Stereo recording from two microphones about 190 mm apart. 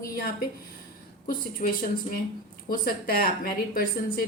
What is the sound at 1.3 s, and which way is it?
Speech, 50° left (ahead or behind).